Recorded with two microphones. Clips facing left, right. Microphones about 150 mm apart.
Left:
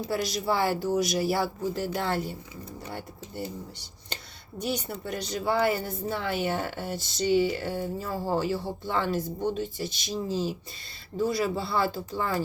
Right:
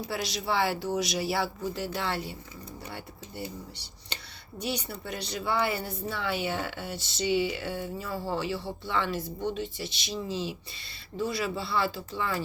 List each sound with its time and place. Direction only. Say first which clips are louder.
0.1 s speech: left 3 dB; 45° left (ahead or behind)